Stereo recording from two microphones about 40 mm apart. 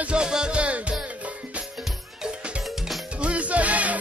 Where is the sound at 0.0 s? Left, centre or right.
Right.